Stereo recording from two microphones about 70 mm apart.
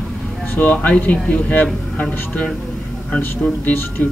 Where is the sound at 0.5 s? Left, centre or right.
Left.